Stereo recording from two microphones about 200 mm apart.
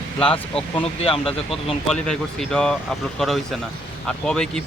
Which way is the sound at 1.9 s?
5° left (ahead or behind).